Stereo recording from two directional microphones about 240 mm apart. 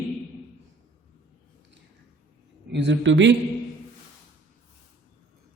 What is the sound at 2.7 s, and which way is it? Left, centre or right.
Speech, right.